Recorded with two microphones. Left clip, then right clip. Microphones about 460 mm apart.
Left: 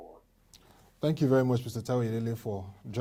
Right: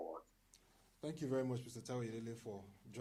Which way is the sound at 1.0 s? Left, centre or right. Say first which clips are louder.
Left 15 dB; left.